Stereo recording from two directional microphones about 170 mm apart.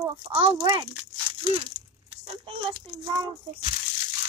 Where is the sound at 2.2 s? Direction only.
35° right (ahead or behind).